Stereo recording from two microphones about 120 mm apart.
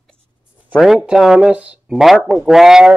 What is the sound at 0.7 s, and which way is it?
Speech, 5° right (ahead or behind).